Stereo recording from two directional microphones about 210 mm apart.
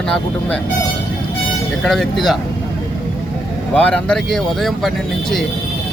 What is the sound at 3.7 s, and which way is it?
Speech, 5° left (ahead or behind).